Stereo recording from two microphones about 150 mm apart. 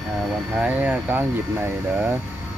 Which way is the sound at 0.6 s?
10° right (ahead or behind).